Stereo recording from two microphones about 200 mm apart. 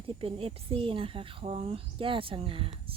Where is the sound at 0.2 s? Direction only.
30° right (ahead or behind).